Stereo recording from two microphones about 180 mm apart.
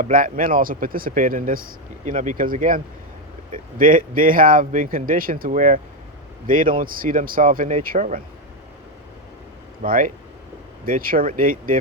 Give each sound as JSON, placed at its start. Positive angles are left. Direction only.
{"t": 0.0, "sound": "speech", "side_deg": -50}
{"t": 9.8, "sound": "speech", "side_deg": -50}